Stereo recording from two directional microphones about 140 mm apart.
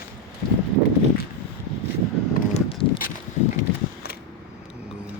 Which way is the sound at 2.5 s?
40° left (ahead or behind).